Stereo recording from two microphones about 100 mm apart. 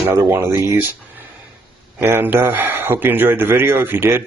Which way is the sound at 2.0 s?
20° right (ahead or behind).